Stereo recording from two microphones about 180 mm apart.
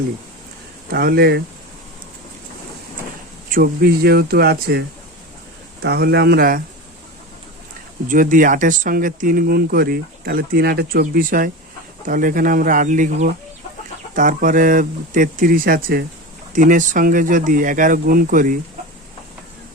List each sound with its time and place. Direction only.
0.9 s speech: 60° right (ahead or behind)
3.5 s speech: 55° right (ahead or behind)
5.8 s speech: 65° right (ahead or behind)
8.0 s speech: 50° right (ahead or behind)
16.5 s speech: 45° right (ahead or behind)